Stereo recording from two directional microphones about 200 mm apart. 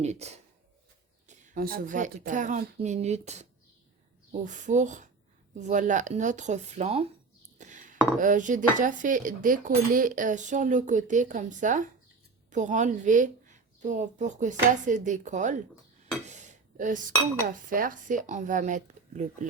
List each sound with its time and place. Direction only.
0.0 s speech: 35° right (ahead or behind)
16.2 s a sound: 35° right (ahead or behind)
17.4 s speech: 45° right (ahead or behind)